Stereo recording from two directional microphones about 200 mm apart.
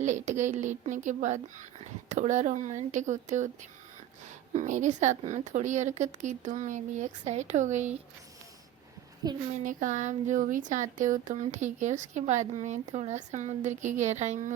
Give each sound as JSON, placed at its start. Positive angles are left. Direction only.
{"t": 0.0, "sound": "speech", "side_deg": -35}
{"t": 9.5, "sound": "speech", "side_deg": -40}